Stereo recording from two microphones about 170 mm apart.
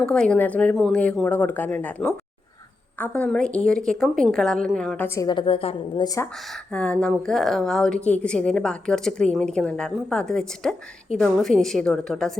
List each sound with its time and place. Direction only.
0.0 s a woman's voice: 5° left (ahead or behind)
5.0 s a woman's voice: 20° left (ahead or behind)
6.5 s a woman's voice: 5° left (ahead or behind)